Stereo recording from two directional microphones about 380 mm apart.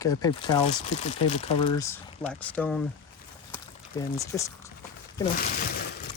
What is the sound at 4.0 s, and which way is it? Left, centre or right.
Speech, centre.